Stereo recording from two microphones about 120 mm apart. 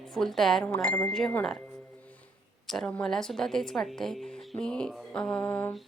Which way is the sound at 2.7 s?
5° left (ahead or behind).